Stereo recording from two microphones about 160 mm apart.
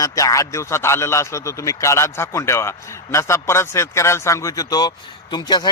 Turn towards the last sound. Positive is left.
turn(degrees=25)  # may be behind; listen again after turning